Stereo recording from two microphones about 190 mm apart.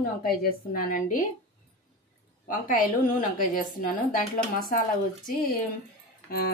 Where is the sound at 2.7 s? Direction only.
45° left (ahead or behind).